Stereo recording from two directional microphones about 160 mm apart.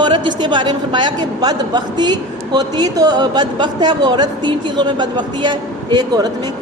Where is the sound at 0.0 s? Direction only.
30° right (ahead or behind).